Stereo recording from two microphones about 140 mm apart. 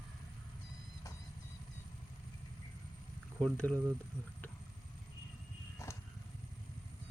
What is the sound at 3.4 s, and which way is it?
Speech, 5° left (ahead or behind).